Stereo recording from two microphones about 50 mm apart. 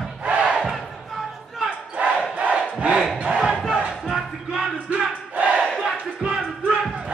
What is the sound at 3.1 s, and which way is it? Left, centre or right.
Battle cry, right.